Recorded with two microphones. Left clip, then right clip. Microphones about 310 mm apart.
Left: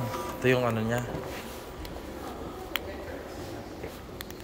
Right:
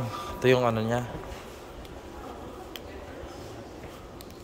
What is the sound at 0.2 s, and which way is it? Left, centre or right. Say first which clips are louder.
Speech: right 3 dB; right.